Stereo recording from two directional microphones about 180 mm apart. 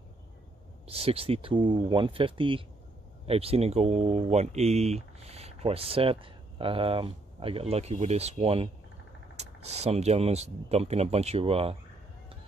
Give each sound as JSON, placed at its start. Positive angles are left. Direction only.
{"t": 0.8, "sound": "speech", "side_deg": -35}